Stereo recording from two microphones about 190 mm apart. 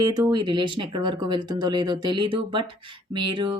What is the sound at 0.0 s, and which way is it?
Speech, 20° right (ahead or behind).